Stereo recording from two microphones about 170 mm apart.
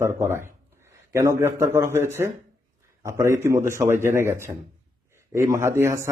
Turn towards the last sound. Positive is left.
turn(degrees=-15)  # may be behind; listen again after turning